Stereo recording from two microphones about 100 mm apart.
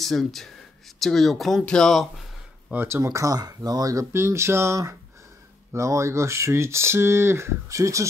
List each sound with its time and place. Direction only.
0.0 s speech: centre (ahead or behind)
2.7 s speech: 20° right (ahead or behind)